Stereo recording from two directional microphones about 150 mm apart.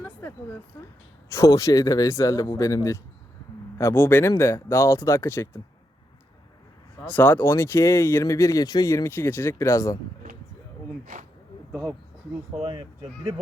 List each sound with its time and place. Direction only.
0.0 s a sound: 15° left (ahead or behind)
0.7 s speech: 20° left (ahead or behind)
7.0 s speech: 10° left (ahead or behind)
11.0 s speech: 60° right (ahead or behind)
12.5 s speech: 35° right (ahead or behind)